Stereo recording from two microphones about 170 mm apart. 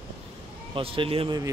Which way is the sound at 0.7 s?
30° right (ahead or behind).